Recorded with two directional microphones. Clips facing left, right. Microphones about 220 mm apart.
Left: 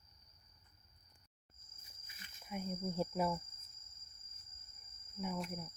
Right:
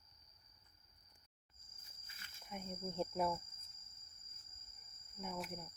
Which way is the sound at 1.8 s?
15° left (ahead or behind).